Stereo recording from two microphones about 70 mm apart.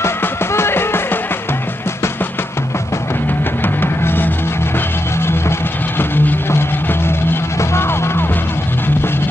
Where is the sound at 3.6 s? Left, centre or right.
Left.